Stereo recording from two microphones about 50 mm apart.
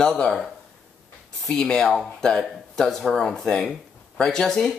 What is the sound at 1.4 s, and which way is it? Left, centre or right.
Speech, centre.